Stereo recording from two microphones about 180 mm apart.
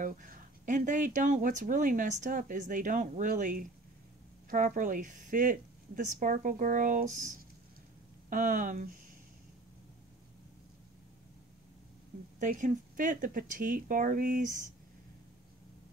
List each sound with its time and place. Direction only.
0.0 s speech: 50° right (ahead or behind)
8.3 s speech: 50° right (ahead or behind)
12.4 s speech: 45° right (ahead or behind)